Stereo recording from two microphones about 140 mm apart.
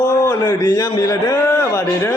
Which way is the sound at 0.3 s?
30° left (ahead or behind).